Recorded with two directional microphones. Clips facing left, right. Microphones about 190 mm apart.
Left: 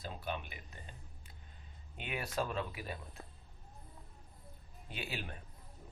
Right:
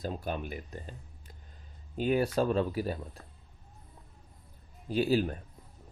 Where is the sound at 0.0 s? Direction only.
45° right (ahead or behind).